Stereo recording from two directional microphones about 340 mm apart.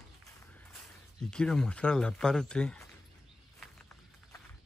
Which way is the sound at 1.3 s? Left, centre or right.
Centre.